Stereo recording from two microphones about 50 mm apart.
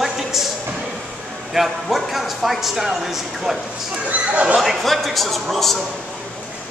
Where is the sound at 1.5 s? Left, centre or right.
Centre.